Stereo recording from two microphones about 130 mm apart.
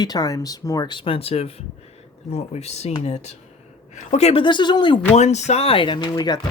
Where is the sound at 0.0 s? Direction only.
30° left (ahead or behind); by 2.9 s 55° left (ahead or behind).